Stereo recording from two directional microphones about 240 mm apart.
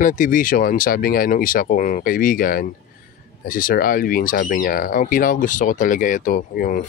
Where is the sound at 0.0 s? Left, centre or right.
Left.